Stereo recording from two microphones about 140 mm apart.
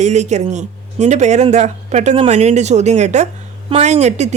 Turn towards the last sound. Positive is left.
turn(degrees=-55)  # may be behind; listen again after turning